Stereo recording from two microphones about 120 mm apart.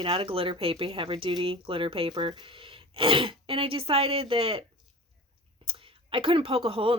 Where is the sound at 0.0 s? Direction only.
50° right (ahead or behind).